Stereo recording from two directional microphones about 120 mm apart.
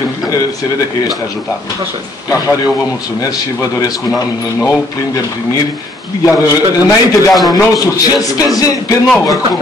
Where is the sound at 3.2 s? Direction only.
30° left (ahead or behind).